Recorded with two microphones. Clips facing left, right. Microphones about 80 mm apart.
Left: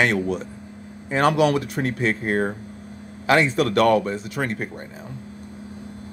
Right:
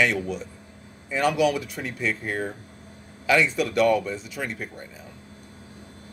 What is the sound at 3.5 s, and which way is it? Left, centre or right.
Speech, left.